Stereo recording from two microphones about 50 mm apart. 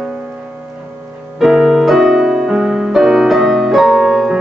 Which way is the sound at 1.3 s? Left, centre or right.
Centre.